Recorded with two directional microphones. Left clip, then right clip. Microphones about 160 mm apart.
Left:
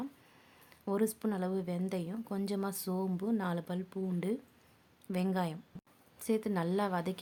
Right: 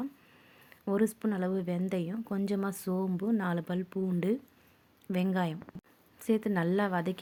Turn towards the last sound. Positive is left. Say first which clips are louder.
# right 3 dB
turn(degrees=-15)  # may be behind; listen again after turning